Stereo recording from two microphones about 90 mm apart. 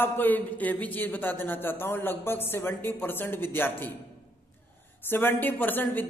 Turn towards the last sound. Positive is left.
turn(degrees=20)  # may be behind; listen again after turning